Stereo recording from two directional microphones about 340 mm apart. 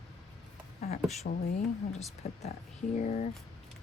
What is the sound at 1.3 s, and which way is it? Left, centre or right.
Speech, left.